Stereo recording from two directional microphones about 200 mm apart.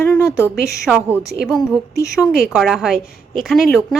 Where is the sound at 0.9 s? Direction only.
5° right (ahead or behind).